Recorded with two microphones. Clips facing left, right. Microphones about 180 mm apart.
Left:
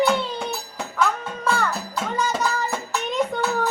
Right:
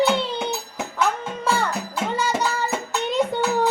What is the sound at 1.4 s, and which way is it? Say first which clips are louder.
Music: even; 25° right (ahead or behind).